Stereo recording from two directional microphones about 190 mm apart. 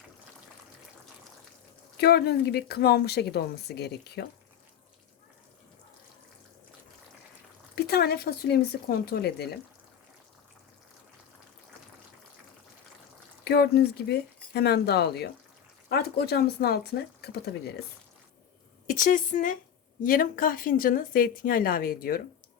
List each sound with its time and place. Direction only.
2.0 s speech: 60° left (ahead or behind)
7.9 s speech: 55° left (ahead or behind)
13.4 s speech: 60° left (ahead or behind)
18.9 s speech: 45° left (ahead or behind)